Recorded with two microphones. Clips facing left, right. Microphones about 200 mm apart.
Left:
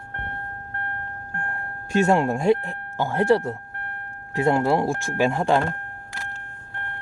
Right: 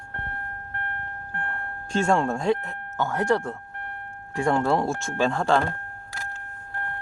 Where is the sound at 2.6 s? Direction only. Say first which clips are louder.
Left 1 dB; 25° left (ahead or behind).